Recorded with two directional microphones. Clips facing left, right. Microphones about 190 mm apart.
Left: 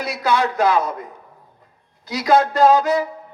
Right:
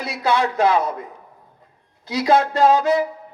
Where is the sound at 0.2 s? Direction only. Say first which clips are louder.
Right 1 dB; 30° right (ahead or behind).